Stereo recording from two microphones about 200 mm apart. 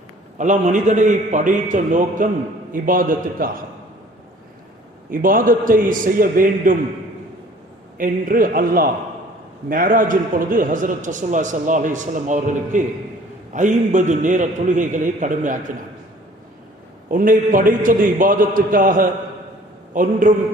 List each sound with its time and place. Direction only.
0.3 s a man's voice: 40° right (ahead or behind)
5.1 s a man's voice: 45° right (ahead or behind)
7.9 s a man's voice: 45° right (ahead or behind)
17.1 s a man's voice: 40° right (ahead or behind)